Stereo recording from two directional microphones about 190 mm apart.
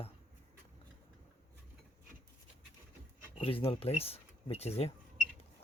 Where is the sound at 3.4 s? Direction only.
30° left (ahead or behind).